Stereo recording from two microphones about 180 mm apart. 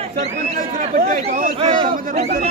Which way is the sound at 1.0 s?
55° right (ahead or behind).